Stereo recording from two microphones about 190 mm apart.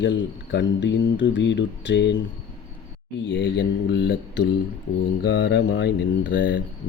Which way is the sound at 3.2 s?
65° left (ahead or behind).